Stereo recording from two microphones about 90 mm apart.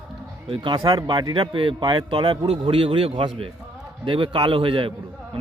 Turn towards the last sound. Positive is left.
turn(degrees=-80)